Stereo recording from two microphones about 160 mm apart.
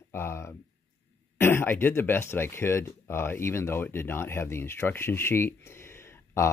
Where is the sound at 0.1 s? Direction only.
15° left (ahead or behind).